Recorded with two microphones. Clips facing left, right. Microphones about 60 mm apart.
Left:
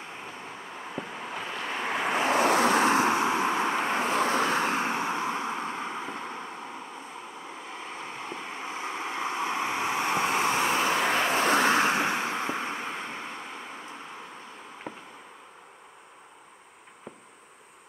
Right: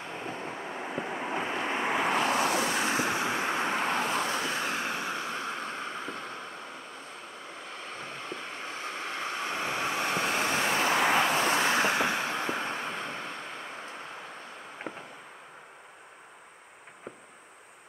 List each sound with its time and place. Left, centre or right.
0.3 s vehicle: centre
2.1 s vehicle: centre
2.5 s vehicle: left
3.1 s vehicle: left
3.5 s vehicle: centre
3.9 s vehicle: centre
4.2 s vehicle: left
4.6 s vehicle: left; by 6.8 s centre
7.6 s waves: centre
11.4 s vehicle: left; by 13.4 s centre
14.9 s fireworks: centre